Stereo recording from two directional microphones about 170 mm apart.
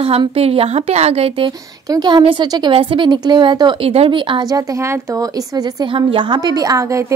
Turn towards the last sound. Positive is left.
turn(degrees=-20)  # may be behind; listen again after turning